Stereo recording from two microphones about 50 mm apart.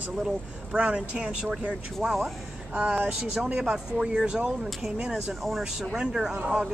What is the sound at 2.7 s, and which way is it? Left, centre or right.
Speech, right.